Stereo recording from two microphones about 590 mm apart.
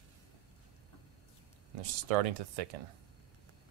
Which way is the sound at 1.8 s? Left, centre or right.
Right.